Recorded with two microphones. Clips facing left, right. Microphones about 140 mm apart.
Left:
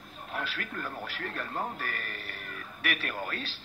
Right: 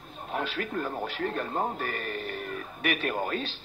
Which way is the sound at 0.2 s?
40° right (ahead or behind).